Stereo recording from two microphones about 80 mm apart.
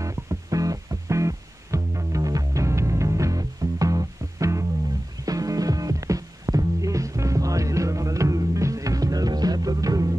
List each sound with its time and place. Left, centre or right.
0.0 s music: right